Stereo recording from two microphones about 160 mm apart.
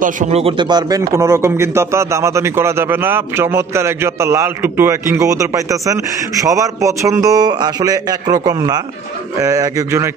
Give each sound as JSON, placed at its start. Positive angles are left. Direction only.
{"t": 0.0, "sound": "speech", "side_deg": -45}